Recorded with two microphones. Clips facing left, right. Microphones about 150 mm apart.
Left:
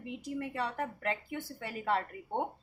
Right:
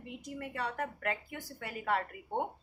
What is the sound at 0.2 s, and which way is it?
Speech, 30° left (ahead or behind).